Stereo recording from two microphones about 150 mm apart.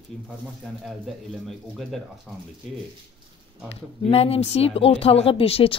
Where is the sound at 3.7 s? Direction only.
40° left (ahead or behind).